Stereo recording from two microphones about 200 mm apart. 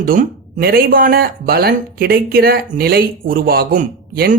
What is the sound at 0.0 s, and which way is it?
Speech, 45° right (ahead or behind).